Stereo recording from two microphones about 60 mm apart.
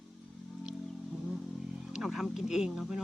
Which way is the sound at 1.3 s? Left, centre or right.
Centre.